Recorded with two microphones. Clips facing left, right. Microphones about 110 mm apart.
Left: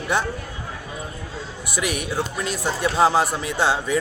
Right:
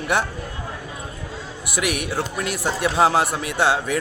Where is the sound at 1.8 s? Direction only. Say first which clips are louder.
Right 2 dB; 75° right (ahead or behind).